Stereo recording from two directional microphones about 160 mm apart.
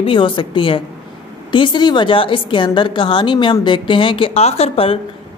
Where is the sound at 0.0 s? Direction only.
30° left (ahead or behind).